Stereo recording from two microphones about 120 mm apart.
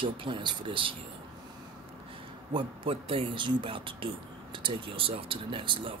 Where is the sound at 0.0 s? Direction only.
45° right (ahead or behind).